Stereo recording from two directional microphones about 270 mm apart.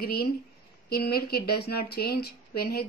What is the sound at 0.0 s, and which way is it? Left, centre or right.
Speech, left.